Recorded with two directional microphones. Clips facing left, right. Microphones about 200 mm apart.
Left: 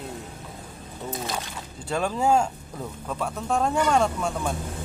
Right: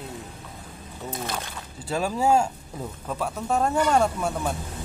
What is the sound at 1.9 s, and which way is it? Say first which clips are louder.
Speech: even; 5° right (ahead or behind).